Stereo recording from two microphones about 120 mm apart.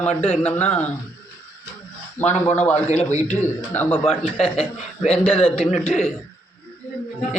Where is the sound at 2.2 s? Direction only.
65° left (ahead or behind).